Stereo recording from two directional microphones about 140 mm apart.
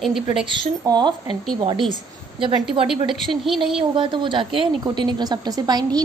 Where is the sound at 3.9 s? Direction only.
35° right (ahead or behind).